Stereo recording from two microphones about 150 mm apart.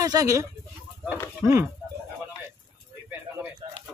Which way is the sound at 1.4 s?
15° right (ahead or behind).